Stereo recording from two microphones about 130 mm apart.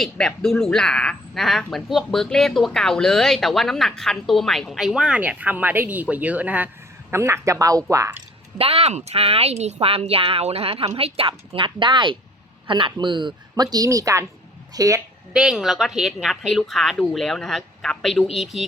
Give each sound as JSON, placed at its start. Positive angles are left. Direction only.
{"t": 0.0, "sound": "a woman's voice", "side_deg": 5}
{"t": 8.5, "sound": "speech", "side_deg": -50}
{"t": 15.3, "sound": "a woman's voice", "side_deg": -5}